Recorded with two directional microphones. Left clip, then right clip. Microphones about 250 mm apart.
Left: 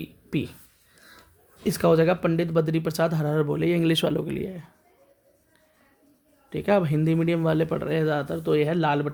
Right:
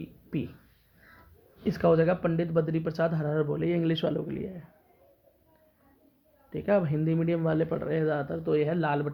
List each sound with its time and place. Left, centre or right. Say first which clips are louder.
0.0 s speech: left 5 dB; left
1.6 s speech: left 3 dB; left
6.5 s speech: left 4 dB; left